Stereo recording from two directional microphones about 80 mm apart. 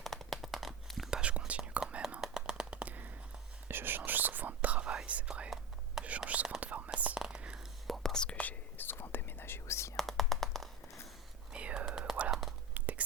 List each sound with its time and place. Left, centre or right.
0.0 s whispering: centre
1.2 s whispering: centre
5.5 s whispering: centre
6.1 s whispering: centre
7.9 s whispering: centre; by 9.9 s left
10.0 s whispering: centre
11.5 s whispering: centre
11.9 s whispering: centre
12.7 s biting: right